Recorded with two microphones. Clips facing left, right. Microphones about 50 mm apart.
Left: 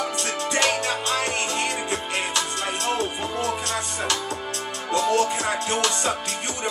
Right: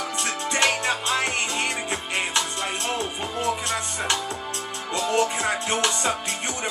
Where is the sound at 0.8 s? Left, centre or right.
Right.